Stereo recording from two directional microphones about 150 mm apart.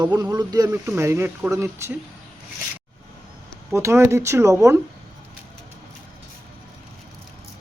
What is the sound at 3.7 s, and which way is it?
Speech, 20° right (ahead or behind).